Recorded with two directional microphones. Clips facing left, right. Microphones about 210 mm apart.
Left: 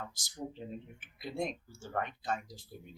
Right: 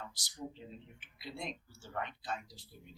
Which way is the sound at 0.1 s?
45° left (ahead or behind).